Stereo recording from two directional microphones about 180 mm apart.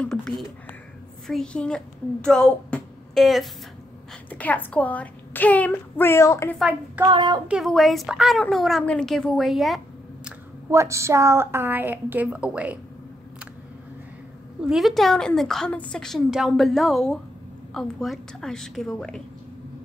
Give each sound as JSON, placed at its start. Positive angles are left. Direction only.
{"t": 0.0, "sound": "a woman's voice", "side_deg": 5}
{"t": 7.1, "sound": "a sound", "side_deg": -25}
{"t": 7.4, "sound": "a woman's voice", "side_deg": 0}
{"t": 10.7, "sound": "a woman's voice", "side_deg": -15}
{"t": 14.6, "sound": "a woman's voice", "side_deg": 0}